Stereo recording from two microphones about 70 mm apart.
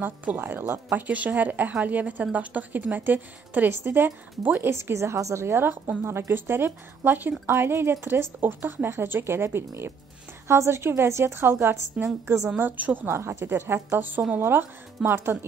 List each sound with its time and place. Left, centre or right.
0.0 s a woman's voice: right
4.7 s speech: right
12.5 s a woman's voice: right
13.1 s a woman's voice: right